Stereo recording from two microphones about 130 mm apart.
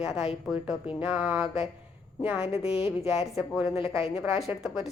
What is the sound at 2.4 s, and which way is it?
A woman's voice, 50° left (ahead or behind).